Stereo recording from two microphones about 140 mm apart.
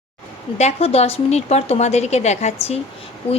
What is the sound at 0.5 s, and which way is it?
A woman's voice, 50° left (ahead or behind).